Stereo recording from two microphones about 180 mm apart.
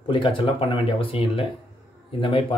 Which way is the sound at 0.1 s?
30° left (ahead or behind).